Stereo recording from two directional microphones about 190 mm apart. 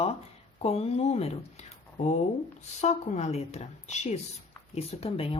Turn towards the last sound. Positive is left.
turn(degrees=30)  # may be behind; listen again after turning